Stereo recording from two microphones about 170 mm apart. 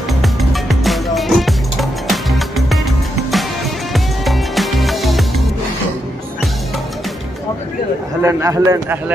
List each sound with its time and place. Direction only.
0.2 s music: centre (ahead or behind)
3.9 s music: centre (ahead or behind)
8.2 s a man's voice: 15° right (ahead or behind)